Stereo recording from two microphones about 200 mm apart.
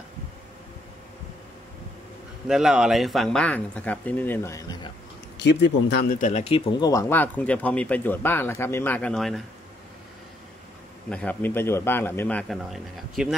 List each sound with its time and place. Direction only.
2.4 s speech: centre (ahead or behind); by 4.9 s 20° left (ahead or behind)
5.4 s speech: 60° left (ahead or behind); by 6.6 s 30° left (ahead or behind)
6.8 s speech: 15° left (ahead or behind)
11.1 s speech: 5° left (ahead or behind)